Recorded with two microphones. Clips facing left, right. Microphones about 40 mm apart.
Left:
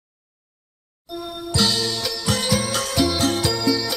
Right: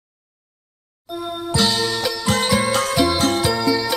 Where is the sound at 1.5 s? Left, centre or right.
Centre.